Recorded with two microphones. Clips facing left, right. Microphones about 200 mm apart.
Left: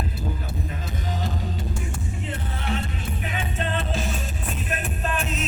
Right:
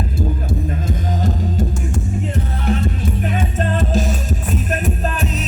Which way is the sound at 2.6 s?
45° right (ahead or behind).